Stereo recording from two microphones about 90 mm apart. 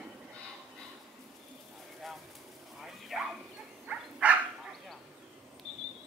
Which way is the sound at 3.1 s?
Centre (ahead or behind).